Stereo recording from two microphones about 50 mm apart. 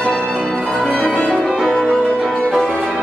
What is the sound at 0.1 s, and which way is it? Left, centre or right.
Music, centre.